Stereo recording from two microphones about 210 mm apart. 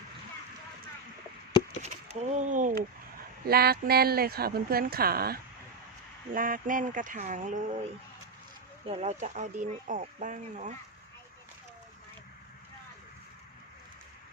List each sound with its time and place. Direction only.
1.8 s a sound: 35° right (ahead or behind)
3.4 s speech: 45° right (ahead or behind)
8.9 s speech: 30° right (ahead or behind)